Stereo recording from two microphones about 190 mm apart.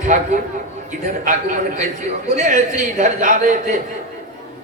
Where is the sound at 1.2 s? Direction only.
45° right (ahead or behind).